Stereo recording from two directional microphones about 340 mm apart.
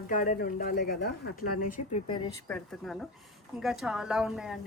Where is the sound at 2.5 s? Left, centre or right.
Centre.